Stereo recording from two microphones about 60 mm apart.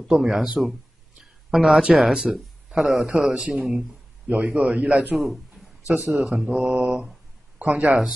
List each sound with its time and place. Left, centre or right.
0.1 s mantra: centre
1.5 s speech: centre
3.1 s mantra: centre
4.3 s a man's voice: right
5.1 s a sound: centre
6.1 s mantra: centre
7.5 s speech: right